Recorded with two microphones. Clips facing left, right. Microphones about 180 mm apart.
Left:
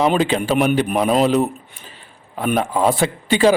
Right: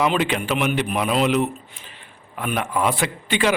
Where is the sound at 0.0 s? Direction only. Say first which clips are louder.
Left 4 dB; 35° left (ahead or behind).